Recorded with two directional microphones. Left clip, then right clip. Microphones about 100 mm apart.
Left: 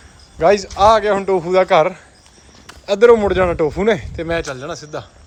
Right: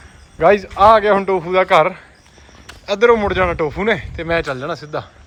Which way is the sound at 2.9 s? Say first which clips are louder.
Left 2 dB; 55° left (ahead or behind).